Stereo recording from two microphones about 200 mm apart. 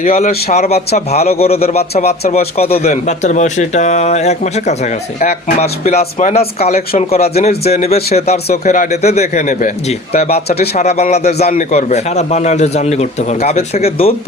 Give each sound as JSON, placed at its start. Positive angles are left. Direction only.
{"t": 0.0, "sound": "a man's voice", "side_deg": 45}